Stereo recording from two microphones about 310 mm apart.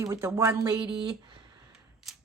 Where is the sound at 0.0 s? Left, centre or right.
Centre.